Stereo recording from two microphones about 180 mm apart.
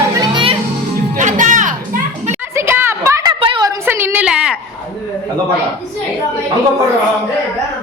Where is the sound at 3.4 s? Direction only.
25° right (ahead or behind).